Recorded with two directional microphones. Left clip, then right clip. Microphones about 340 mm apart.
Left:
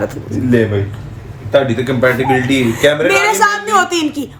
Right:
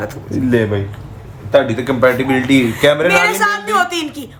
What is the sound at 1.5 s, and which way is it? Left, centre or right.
Speech, centre.